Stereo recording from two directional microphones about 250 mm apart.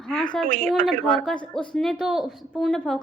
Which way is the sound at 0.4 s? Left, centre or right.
Right.